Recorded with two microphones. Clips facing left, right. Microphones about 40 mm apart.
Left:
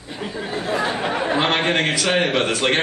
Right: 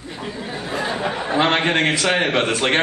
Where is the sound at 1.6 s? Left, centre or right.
Centre.